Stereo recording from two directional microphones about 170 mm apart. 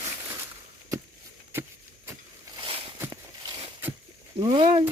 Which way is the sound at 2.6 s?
30° right (ahead or behind).